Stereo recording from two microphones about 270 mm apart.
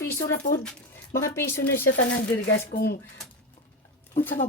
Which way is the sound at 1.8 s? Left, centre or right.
Left.